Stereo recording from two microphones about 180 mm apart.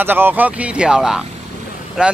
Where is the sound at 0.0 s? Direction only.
10° right (ahead or behind).